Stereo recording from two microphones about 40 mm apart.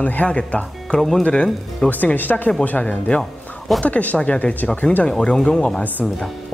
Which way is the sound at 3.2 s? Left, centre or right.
Centre.